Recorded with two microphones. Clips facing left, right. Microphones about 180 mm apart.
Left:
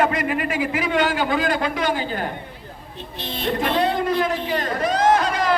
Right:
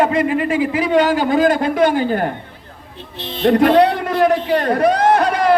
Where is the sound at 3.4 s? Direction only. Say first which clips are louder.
Right 10 dB; 65° right (ahead or behind).